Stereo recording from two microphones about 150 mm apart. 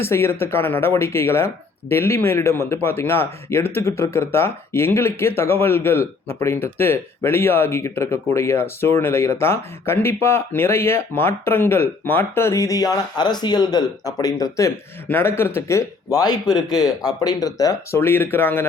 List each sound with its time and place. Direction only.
0.0 s speech: 15° left (ahead or behind)